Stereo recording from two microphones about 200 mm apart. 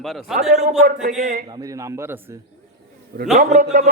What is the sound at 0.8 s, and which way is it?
Speech, 40° right (ahead or behind).